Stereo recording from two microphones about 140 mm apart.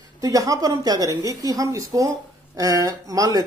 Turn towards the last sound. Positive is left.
turn(degrees=-25)  # may be behind; listen again after turning